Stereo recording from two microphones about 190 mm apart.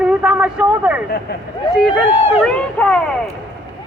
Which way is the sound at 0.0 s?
5° right (ahead or behind).